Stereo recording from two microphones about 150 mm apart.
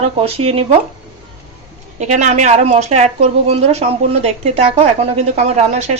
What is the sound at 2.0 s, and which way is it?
A woman's voice, 50° right (ahead or behind).